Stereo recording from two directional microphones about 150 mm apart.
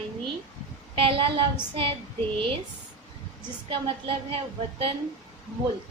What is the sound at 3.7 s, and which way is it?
A woman's voice, 40° right (ahead or behind).